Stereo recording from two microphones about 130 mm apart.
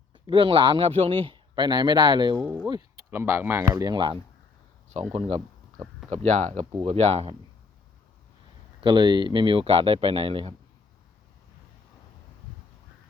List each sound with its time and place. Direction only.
0.3 s speech: 40° right (ahead or behind)
3.1 s speech: 15° right (ahead or behind)
3.8 s speech: 35° right (ahead or behind)
4.9 s speech: 55° right (ahead or behind)
8.8 s speech: 35° right (ahead or behind)